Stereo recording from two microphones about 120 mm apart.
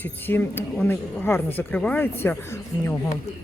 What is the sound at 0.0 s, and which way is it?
A woman's voice, 15° left (ahead or behind).